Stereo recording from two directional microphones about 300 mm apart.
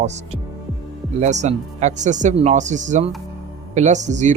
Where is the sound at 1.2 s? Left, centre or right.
Right.